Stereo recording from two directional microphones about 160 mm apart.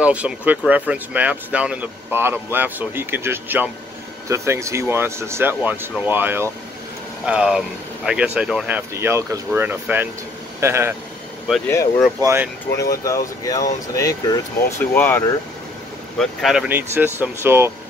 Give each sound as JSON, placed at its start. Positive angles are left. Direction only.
{"t": 0.0, "sound": "speech", "side_deg": -10}
{"t": 11.6, "sound": "speech", "side_deg": 15}
{"t": 12.2, "sound": "speech", "side_deg": -15}
{"t": 12.7, "sound": "speech", "side_deg": 20}
{"t": 16.2, "sound": "speech", "side_deg": 0}
{"t": 16.6, "sound": "speech", "side_deg": -15}